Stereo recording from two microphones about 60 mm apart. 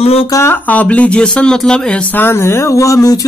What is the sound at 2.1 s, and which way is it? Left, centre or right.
Speech, left.